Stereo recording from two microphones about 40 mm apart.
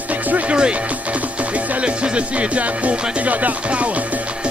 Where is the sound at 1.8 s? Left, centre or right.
Right.